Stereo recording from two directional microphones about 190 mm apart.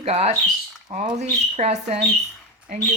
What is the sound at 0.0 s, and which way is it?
Speech, 35° right (ahead or behind).